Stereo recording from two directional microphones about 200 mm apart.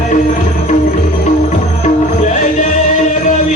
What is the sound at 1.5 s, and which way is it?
Music, 35° left (ahead or behind).